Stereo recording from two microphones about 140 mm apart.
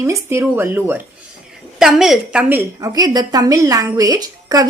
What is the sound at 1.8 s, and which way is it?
Speech, 5° right (ahead or behind).